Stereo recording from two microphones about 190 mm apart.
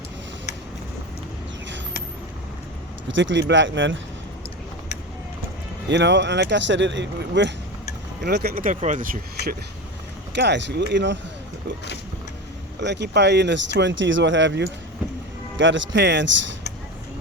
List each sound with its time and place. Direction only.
3.1 s speech: 75° right (ahead or behind)
5.9 s speech: 70° right (ahead or behind)
8.2 s speech: 60° right (ahead or behind); by 9.0 s 40° right (ahead or behind)
10.3 s speech: 65° right (ahead or behind)
12.8 s speech: 65° right (ahead or behind)